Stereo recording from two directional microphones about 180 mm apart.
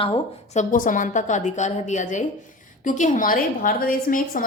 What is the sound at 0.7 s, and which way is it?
A woman's voice, 45° left (ahead or behind).